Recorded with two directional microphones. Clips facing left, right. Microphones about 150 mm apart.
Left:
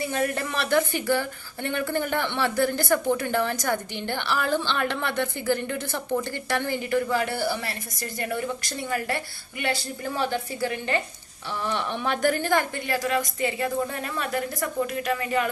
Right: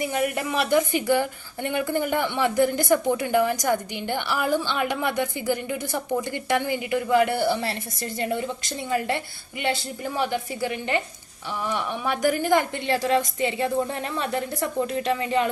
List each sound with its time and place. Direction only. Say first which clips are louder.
0.0 s a woman's voice: right 1 dB; 15° right (ahead or behind)